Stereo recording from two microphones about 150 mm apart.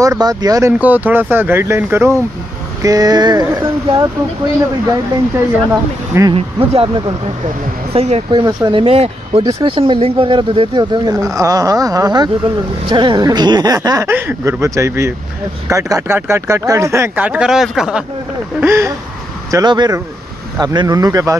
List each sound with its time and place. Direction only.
0.0 s speech: 25° right (ahead or behind)
0.7 s speech: 10° right (ahead or behind)
2.8 s speech: 25° right (ahead or behind)
5.7 s speech: 20° right (ahead or behind)
6.3 s speech: 40° right (ahead or behind)
7.9 s speech: 45° right (ahead or behind)
8.3 s speech: 30° right (ahead or behind)
9.4 s speech: 30° right (ahead or behind); by 18.0 s 5° right (ahead or behind)
18.6 s speech: 20° right (ahead or behind)
19.5 s speech: 30° right (ahead or behind)